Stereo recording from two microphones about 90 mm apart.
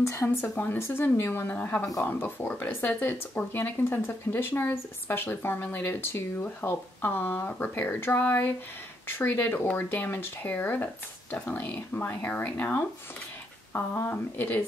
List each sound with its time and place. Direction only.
0.0 s speech: 35° left (ahead or behind)
0.4 s speech: 20° left (ahead or behind)